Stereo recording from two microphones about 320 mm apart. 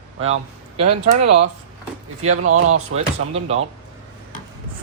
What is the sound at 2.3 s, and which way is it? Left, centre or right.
Speech, right.